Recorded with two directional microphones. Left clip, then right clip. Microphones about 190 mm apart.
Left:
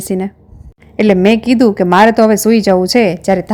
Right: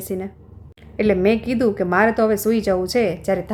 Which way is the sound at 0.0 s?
35° left (ahead or behind).